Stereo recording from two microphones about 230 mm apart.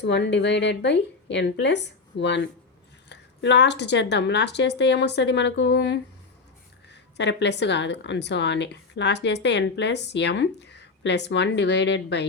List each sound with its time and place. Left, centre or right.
0.0 s a woman's voice: left